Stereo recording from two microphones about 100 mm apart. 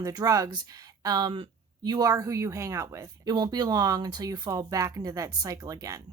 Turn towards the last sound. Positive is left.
turn(degrees=-35)  # may be behind; listen again after turning